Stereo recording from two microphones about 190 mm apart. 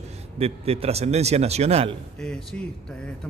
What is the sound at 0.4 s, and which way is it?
A man's voice, 30° right (ahead or behind).